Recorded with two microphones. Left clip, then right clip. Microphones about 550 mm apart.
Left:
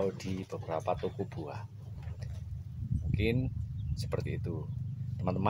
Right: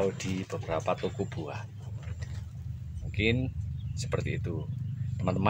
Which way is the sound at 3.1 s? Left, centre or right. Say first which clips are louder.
Right 4 dB; left.